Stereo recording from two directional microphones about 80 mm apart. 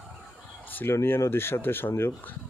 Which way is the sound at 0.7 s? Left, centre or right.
Left.